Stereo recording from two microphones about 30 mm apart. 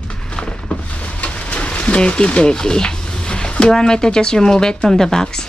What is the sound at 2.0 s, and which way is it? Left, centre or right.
Speech, left.